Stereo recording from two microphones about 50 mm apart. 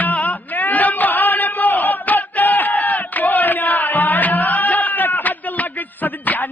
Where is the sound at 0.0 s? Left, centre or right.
Left.